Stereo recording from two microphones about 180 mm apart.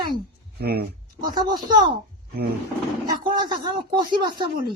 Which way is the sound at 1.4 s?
25° right (ahead or behind).